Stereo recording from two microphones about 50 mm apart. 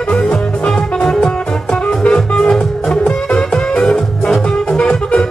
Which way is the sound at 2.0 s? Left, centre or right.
Centre.